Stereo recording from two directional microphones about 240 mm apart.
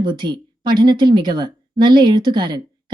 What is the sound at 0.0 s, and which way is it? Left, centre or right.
Speech, centre.